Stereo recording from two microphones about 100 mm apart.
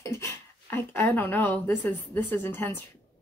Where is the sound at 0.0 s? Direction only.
25° left (ahead or behind).